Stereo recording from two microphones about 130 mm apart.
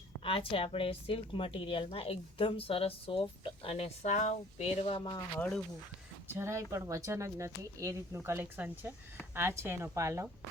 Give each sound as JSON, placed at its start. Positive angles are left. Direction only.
{"t": 0.2, "sound": "a woman's voice", "side_deg": 45}
{"t": 6.2, "sound": "speech", "side_deg": -20}